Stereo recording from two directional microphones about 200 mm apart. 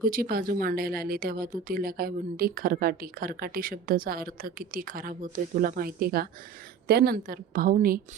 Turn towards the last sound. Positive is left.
turn(degrees=-45)  # may be behind; listen again after turning